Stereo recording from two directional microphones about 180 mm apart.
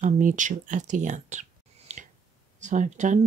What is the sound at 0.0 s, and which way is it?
Speech, 45° right (ahead or behind).